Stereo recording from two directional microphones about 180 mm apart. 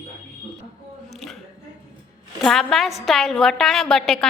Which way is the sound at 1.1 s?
Centre (ahead or behind).